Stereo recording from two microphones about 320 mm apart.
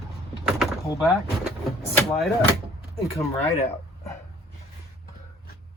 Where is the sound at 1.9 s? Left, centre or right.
Centre.